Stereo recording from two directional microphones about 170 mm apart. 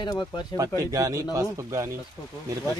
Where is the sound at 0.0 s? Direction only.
25° left (ahead or behind).